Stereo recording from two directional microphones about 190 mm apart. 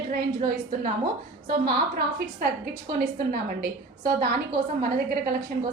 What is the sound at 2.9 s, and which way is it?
Speech, 50° right (ahead or behind).